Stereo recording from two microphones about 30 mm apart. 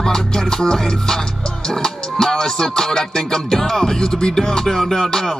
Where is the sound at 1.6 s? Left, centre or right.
Left.